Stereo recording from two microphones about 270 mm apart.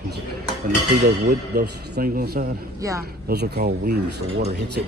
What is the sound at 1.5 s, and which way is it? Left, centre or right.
Speech, right.